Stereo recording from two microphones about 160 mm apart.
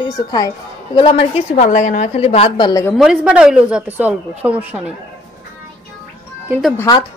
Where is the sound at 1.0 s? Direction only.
35° left (ahead or behind).